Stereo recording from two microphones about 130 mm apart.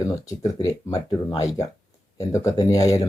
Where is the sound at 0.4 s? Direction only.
25° left (ahead or behind).